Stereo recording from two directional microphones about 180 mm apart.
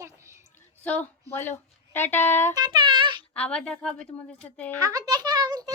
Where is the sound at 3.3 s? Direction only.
5° left (ahead or behind).